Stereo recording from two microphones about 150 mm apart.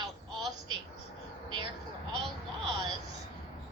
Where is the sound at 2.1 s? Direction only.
Centre (ahead or behind).